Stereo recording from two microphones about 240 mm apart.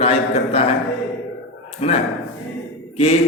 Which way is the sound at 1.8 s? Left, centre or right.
Left.